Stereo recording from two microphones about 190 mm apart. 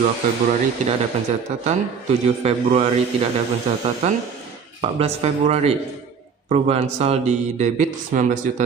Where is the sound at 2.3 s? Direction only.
35° right (ahead or behind).